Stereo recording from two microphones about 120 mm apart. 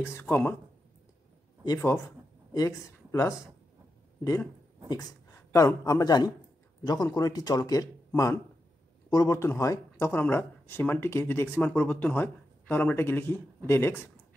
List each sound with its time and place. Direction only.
0.0 s speech: 20° left (ahead or behind)
2.5 s speech: 25° left (ahead or behind)
4.8 s a man's voice: 30° left (ahead or behind)